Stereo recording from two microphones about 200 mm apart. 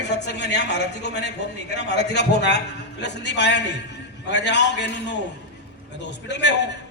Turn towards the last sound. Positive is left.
turn(degrees=60)  # may be behind; listen again after turning